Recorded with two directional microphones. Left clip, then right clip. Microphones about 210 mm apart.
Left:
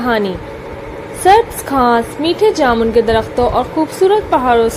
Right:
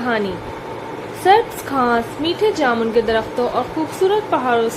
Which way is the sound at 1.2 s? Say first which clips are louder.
Left 4 dB; 20° left (ahead or behind).